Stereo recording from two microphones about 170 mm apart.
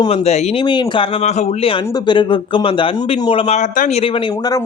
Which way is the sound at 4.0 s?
30° left (ahead or behind).